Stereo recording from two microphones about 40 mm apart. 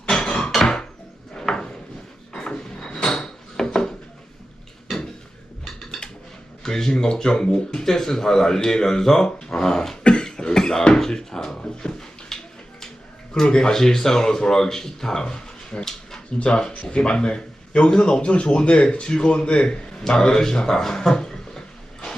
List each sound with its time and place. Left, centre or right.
0.1 s hammer: centre
1.3 s a sound: centre
6.6 s speech: centre
10.0 s cough: left
10.2 s a sound: centre
13.3 s speech: centre
16.4 s a man's voice: left